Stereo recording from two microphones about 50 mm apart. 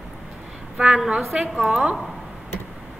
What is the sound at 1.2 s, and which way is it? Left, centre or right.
Speech, centre.